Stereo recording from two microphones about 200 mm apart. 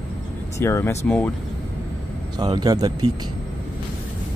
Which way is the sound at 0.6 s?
15° left (ahead or behind).